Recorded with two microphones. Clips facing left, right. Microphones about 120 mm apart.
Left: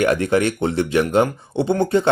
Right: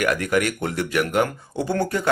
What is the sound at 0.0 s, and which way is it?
Speech, 25° left (ahead or behind).